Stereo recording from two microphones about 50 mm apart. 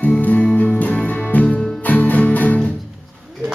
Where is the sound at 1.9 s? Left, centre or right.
Left.